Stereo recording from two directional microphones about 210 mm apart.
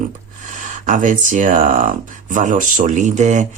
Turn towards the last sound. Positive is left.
turn(degrees=-35)  # may be behind; listen again after turning